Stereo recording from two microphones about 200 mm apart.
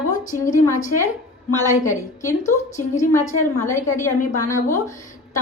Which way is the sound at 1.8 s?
15° left (ahead or behind).